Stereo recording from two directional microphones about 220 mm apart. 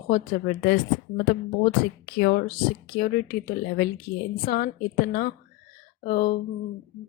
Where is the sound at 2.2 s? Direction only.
45° left (ahead or behind).